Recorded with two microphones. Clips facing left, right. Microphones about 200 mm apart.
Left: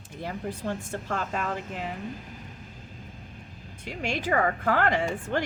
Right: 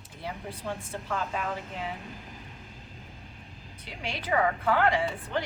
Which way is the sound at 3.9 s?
45° left (ahead or behind).